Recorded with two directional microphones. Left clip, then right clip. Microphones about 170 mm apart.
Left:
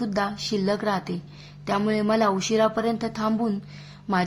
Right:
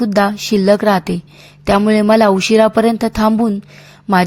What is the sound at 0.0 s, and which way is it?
A woman's voice, 45° right (ahead or behind).